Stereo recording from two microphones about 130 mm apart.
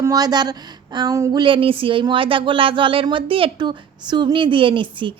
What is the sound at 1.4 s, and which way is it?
A woman's voice, 40° right (ahead or behind).